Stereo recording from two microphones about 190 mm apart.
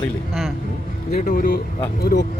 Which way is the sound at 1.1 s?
50° left (ahead or behind).